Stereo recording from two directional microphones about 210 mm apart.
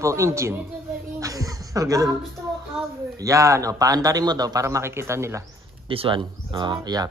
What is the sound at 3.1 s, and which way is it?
Speech, 15° right (ahead or behind).